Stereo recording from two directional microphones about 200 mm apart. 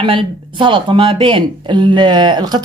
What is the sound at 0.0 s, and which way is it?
Speech, 25° right (ahead or behind).